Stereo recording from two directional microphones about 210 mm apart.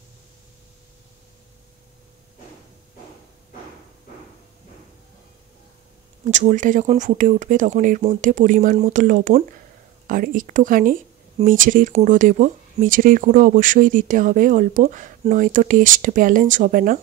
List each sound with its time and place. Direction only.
6.2 s speech: 35° right (ahead or behind)